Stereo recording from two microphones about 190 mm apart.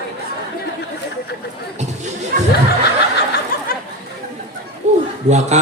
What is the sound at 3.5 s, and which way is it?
Chatter, 50° left (ahead or behind).